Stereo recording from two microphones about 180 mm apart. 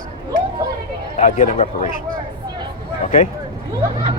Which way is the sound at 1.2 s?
45° left (ahead or behind).